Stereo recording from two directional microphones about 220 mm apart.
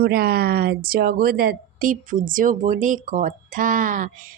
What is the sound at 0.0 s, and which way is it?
A woman's voice, 45° right (ahead or behind).